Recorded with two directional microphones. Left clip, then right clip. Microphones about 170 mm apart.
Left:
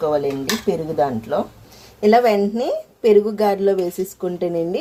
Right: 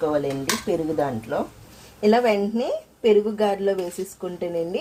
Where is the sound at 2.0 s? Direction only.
20° left (ahead or behind).